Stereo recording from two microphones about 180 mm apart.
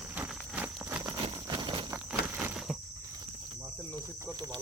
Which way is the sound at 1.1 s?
25° right (ahead or behind).